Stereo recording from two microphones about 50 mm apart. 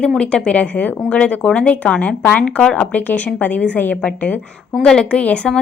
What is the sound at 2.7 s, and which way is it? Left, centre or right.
A woman's voice, left.